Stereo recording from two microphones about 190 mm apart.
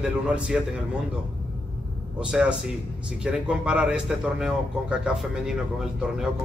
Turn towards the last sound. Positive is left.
turn(degrees=-5)  # may be behind; listen again after turning